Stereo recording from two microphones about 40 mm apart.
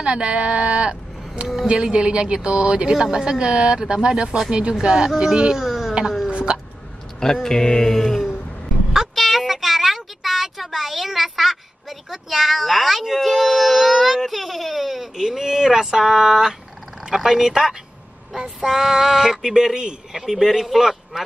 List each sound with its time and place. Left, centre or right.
0.0 s speech: right
4.7 s speech: centre
5.6 s a sound: centre
6.3 s hiccup: right
7.2 s speech: centre
9.1 s child singing: centre
12.1 s a sound: centre
17.1 s speech: centre